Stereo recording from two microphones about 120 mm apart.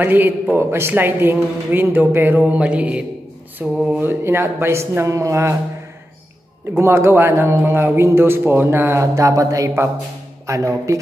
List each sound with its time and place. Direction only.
0.0 s a man's voice: 15° right (ahead or behind)
3.7 s mantra: 5° right (ahead or behind)
4.0 s a man's voice: 20° right (ahead or behind)
6.8 s a man's voice: 20° right (ahead or behind)